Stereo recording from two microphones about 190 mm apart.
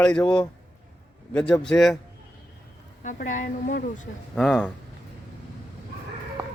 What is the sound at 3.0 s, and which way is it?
A woman's voice, 40° left (ahead or behind).